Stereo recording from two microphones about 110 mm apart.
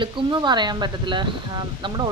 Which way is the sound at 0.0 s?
45° right (ahead or behind).